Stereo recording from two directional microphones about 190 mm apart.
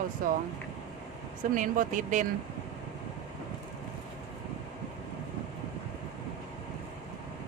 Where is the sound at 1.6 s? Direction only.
45° right (ahead or behind).